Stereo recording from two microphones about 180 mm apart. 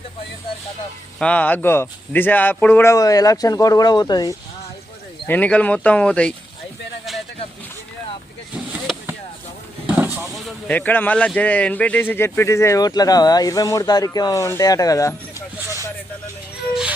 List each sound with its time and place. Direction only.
1.2 s speech: 10° left (ahead or behind)
5.2 s speech: 5° left (ahead or behind)
8.7 s vehicle: 10° right (ahead or behind)
10.3 s speech: 5° left (ahead or behind)